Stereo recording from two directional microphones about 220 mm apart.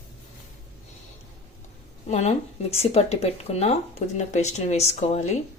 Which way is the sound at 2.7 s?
25° left (ahead or behind).